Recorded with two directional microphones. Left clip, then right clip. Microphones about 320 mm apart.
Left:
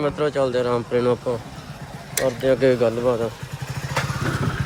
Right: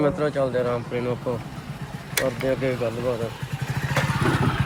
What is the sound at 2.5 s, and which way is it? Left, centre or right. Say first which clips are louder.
Speech: left 7 dB; centre.